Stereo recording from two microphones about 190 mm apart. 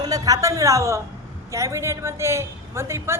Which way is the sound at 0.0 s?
20° right (ahead or behind).